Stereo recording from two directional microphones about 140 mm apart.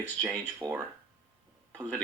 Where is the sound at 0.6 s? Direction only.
25° right (ahead or behind).